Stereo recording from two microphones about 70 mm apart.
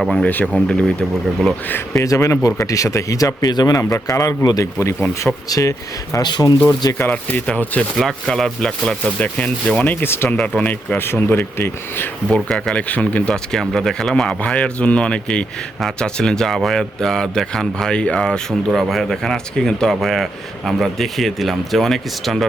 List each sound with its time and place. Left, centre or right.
0.0 s speech: centre
0.3 s speech: left
0.5 s speech: centre
1.9 s speech: left
4.8 s speech: left
5.5 s speech: left
6.1 s speech: left
7.1 s speech: left
7.9 s speech: centre
9.8 s speech: left
10.2 s speech: centre
10.5 s speech: left
12.3 s speech: centre